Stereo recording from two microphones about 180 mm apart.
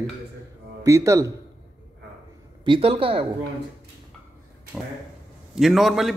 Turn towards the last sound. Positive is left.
turn(degrees=0)  # may be behind; listen again after turning